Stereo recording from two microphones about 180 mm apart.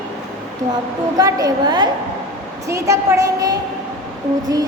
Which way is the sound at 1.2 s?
20° right (ahead or behind).